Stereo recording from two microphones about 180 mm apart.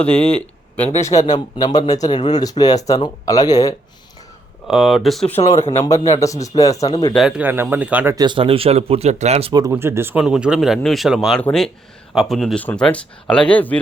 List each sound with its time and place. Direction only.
0.0 s speech: 5° left (ahead or behind)
4.7 s speech: centre (ahead or behind)
5.7 s a man's voice: 20° left (ahead or behind)
7.1 s speech: centre (ahead or behind)
8.1 s speech: 25° right (ahead or behind)
9.5 s speech: 20° right (ahead or behind); by 13.7 s 10° left (ahead or behind)